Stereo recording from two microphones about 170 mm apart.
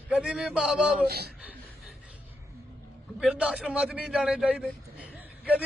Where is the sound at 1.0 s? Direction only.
70° right (ahead or behind).